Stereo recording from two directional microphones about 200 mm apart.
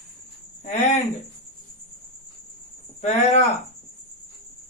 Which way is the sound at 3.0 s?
35° left (ahead or behind).